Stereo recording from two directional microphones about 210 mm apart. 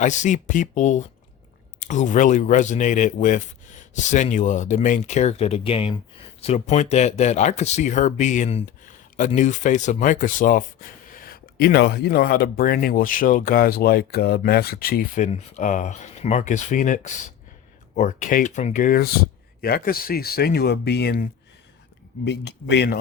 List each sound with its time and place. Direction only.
0.0 s speech: 35° left (ahead or behind); by 23.0 s 55° left (ahead or behind)